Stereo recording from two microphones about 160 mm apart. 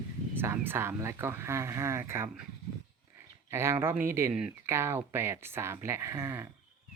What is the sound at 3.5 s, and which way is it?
Speech, 15° right (ahead or behind).